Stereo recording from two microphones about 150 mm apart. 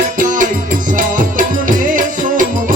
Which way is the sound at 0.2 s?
60° right (ahead or behind).